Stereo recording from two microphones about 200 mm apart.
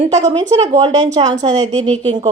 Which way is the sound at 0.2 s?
35° right (ahead or behind).